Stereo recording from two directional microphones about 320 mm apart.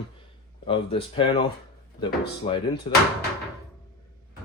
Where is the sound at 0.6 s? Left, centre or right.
Centre.